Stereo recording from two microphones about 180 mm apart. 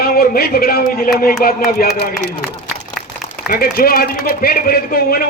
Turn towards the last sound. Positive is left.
turn(degrees=55)  # may be behind; listen again after turning